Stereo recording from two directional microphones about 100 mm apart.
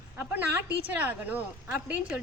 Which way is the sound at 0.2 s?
20° right (ahead or behind).